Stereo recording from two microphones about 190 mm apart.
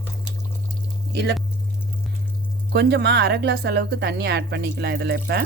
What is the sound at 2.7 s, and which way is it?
Speech, 60° right (ahead or behind).